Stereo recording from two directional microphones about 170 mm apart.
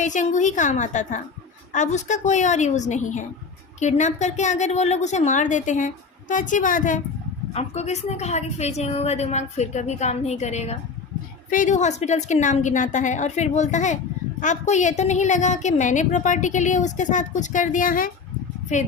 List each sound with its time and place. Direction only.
0.0 s a woman's voice: 45° left (ahead or behind)
7.5 s a woman's voice: 40° left (ahead or behind)